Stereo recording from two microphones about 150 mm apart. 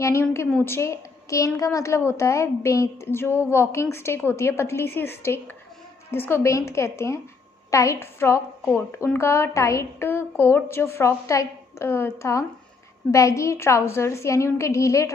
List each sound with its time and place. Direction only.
0.0 s a woman's voice: 20° left (ahead or behind)